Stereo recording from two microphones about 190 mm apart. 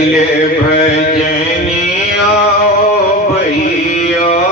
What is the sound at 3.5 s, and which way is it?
Music, 40° left (ahead or behind).